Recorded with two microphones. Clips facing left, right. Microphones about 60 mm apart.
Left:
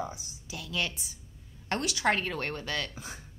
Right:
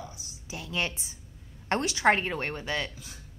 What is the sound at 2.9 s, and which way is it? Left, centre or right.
Speech, left.